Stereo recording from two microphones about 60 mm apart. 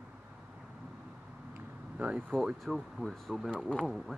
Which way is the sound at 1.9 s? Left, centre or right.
Right.